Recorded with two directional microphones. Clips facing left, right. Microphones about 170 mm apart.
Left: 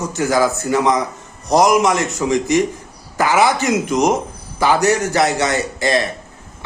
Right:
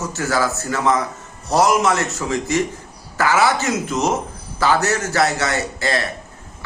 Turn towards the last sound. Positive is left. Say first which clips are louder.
# left 4 dB
turn(degrees=15)  # may be behind; listen again after turning